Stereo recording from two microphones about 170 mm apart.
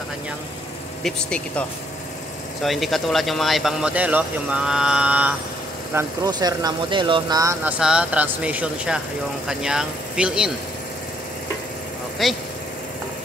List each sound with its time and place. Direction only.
1.0 s speech: 5° left (ahead or behind)
5.9 s speech: 20° right (ahead or behind)
7.6 s speech: 5° right (ahead or behind)
12.2 s speech: centre (ahead or behind)